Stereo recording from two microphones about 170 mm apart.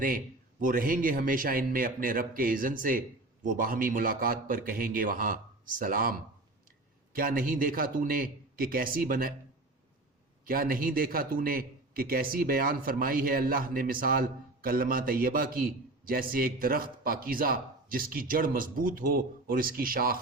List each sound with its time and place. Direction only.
0.6 s a man's voice: 55° right (ahead or behind)
10.4 s a man's voice: 60° right (ahead or behind)